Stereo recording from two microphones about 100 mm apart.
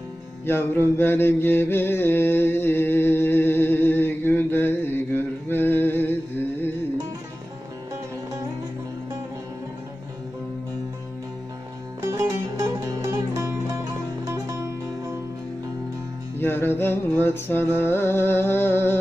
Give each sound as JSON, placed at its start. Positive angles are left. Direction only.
{"t": 0.5, "sound": "mantra", "side_deg": 20}
{"t": 12.1, "sound": "music", "side_deg": -30}
{"t": 16.3, "sound": "music", "side_deg": 20}